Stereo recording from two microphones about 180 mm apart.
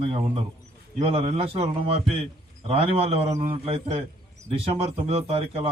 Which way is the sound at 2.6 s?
35° right (ahead or behind).